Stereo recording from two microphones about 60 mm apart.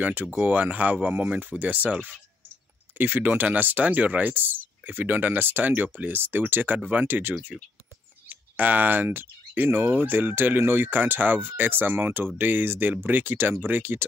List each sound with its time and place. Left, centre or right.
0.0 s speech: right
3.0 s speech: right